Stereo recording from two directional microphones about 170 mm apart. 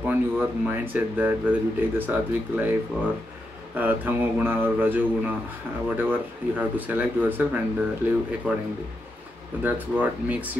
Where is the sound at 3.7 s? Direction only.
10° right (ahead or behind).